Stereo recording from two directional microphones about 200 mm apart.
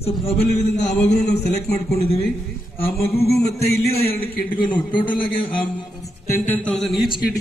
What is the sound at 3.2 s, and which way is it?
Music, 50° left (ahead or behind).